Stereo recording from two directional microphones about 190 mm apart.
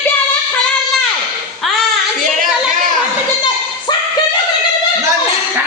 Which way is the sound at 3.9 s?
25° left (ahead or behind).